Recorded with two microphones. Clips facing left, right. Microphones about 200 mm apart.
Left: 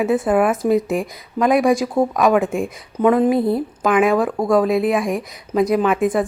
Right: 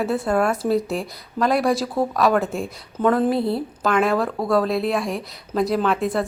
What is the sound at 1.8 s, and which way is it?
Speech, 15° left (ahead or behind).